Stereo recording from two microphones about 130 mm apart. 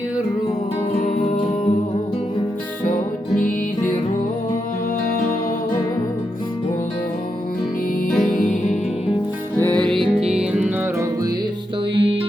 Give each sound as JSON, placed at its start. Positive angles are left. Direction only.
{"t": 8.2, "sound": "music", "side_deg": 90}
{"t": 9.6, "sound": "music", "side_deg": 10}
{"t": 11.9, "sound": "music", "side_deg": -45}